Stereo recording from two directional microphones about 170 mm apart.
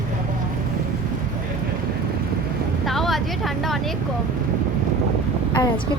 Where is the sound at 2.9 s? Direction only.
Centre (ahead or behind).